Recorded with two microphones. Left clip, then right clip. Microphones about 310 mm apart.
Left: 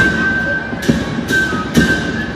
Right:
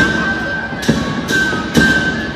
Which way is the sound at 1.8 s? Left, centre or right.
Right.